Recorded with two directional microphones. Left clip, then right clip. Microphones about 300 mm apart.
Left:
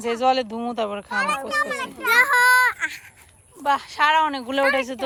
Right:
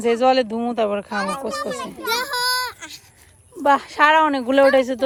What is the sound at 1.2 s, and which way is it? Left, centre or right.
Speech, left.